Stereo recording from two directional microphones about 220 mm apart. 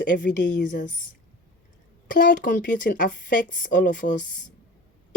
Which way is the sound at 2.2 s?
35° left (ahead or behind).